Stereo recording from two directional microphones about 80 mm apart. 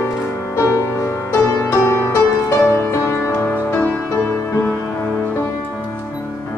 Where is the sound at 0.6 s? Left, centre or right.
Left.